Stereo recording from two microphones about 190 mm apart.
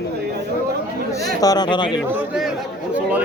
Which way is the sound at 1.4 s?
20° left (ahead or behind).